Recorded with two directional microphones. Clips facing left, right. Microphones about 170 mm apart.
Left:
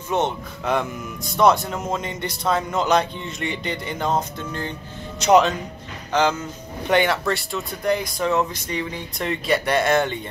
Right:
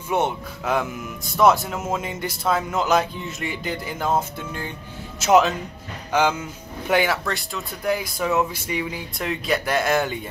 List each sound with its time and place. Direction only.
0.1 s speech: 5° right (ahead or behind)